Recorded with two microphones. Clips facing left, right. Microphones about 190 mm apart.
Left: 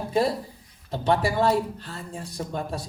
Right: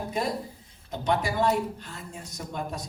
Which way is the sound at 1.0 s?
30° left (ahead or behind).